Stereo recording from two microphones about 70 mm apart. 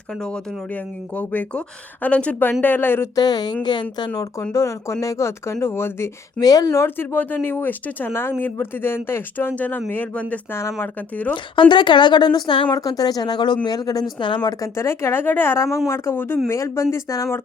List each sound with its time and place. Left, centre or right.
0.1 s speech: centre
0.7 s speech: left
3.2 s a woman's voice: left
4.5 s speech: left
6.4 s a woman's voice: left
6.7 s speech: left
10.5 s speech: left
10.8 s speech: left
11.7 s a woman's voice: left
12.7 s speech: left
13.7 s speech: left
14.6 s speech: left
16.5 s speech: left